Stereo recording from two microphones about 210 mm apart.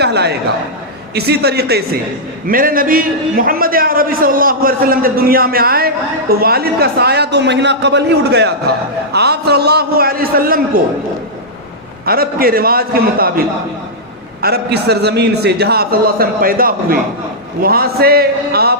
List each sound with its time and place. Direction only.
0.0 s a man's voice: 50° right (ahead or behind)
12.0 s a man's voice: 45° right (ahead or behind)
14.4 s a man's voice: 50° right (ahead or behind)